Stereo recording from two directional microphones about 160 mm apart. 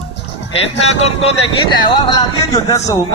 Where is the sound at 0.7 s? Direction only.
40° left (ahead or behind).